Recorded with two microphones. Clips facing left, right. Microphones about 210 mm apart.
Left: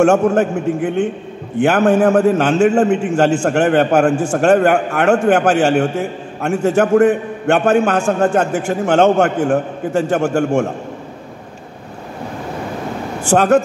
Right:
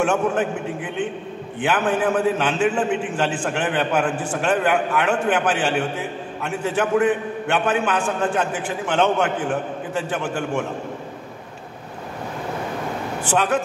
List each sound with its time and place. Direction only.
0.0 s a man's voice: 45° left (ahead or behind)
13.2 s a man's voice: 45° left (ahead or behind)